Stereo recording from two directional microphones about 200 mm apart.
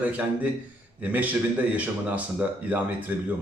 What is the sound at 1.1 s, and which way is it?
A man's voice, 10° right (ahead or behind).